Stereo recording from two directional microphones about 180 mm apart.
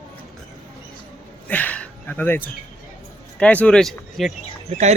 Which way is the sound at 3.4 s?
5° left (ahead or behind).